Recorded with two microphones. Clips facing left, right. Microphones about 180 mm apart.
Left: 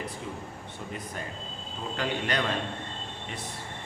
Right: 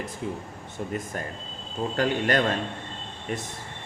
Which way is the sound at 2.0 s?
45° right (ahead or behind).